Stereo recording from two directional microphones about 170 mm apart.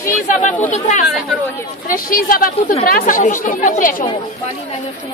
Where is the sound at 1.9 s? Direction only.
55° left (ahead or behind).